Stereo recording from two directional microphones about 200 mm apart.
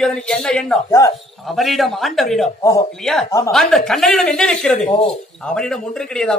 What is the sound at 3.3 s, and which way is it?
Speech, 15° left (ahead or behind).